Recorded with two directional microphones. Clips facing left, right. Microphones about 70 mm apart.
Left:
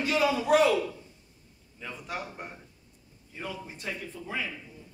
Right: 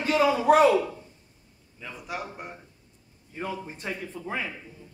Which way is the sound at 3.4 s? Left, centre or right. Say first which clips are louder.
Right 5 dB; right.